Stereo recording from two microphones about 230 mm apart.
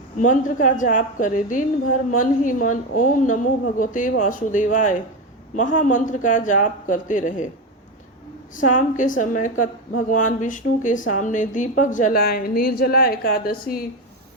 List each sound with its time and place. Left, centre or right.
0.2 s speech: left
8.5 s speech: left